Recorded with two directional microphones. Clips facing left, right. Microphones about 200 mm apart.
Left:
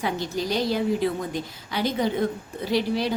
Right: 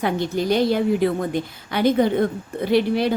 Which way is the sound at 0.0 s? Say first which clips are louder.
Right 5 dB; 55° right (ahead or behind).